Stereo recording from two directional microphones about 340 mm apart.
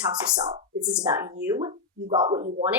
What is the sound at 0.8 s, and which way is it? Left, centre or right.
A woman's voice, centre.